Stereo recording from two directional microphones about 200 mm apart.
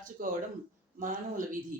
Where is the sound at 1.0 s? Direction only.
40° right (ahead or behind).